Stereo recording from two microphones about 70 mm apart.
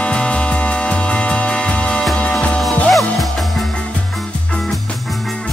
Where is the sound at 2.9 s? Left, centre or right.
Centre.